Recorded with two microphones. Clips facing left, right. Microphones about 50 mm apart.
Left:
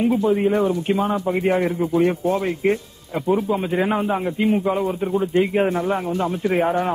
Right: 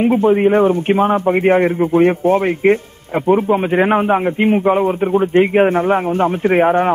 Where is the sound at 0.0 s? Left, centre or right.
Right.